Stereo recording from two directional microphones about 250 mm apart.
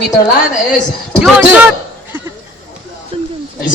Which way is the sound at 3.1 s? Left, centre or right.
Right.